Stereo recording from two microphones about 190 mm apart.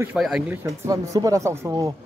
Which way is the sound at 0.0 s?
5° right (ahead or behind).